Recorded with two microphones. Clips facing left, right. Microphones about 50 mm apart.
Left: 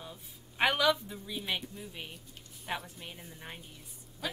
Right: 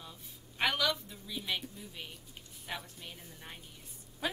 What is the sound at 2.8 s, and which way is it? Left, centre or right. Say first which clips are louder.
Speech: left 3 dB; centre.